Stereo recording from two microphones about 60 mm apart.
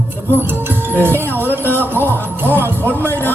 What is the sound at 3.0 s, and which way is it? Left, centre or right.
Music, left.